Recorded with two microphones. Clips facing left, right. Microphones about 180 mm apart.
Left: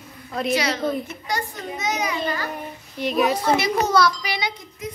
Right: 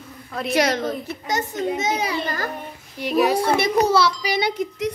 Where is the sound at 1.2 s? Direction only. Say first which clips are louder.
Right 10 dB; 20° right (ahead or behind).